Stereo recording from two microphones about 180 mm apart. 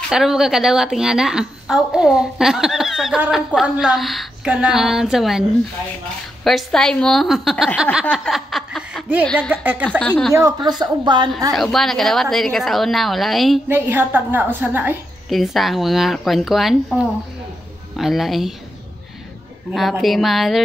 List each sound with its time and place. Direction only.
0.1 s a woman's voice: 5° right (ahead or behind)
6.4 s a woman's voice: centre (ahead or behind)
8.1 s a sound: centre (ahead or behind)
9.5 s speech: 10° right (ahead or behind)
9.8 s a woman's voice: 5° left (ahead or behind)
10.3 s speech: 20° right (ahead or behind)
11.5 s a woman's voice: centre (ahead or behind)
13.7 s a woman's voice: 10° right (ahead or behind)
19.7 s a woman's voice: centre (ahead or behind)